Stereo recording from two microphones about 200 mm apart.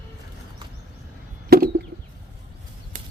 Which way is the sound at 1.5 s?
50° right (ahead or behind).